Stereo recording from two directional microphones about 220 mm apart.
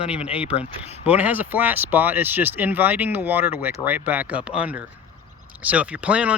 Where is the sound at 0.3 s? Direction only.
5° right (ahead or behind).